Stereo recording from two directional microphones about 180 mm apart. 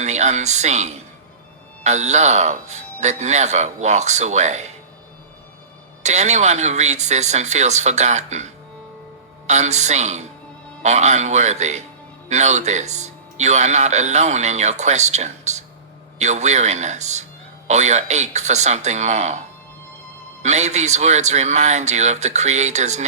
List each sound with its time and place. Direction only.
0.0 s speech: 40° right (ahead or behind)
6.0 s speech: 40° right (ahead or behind)